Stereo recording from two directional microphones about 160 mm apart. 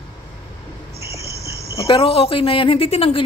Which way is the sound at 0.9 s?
20° right (ahead or behind).